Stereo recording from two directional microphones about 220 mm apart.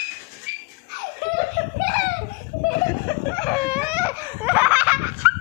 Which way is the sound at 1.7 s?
35° left (ahead or behind).